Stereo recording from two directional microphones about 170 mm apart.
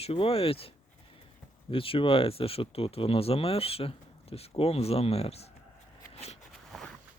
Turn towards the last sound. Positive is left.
turn(degrees=0)  # may be behind; listen again after turning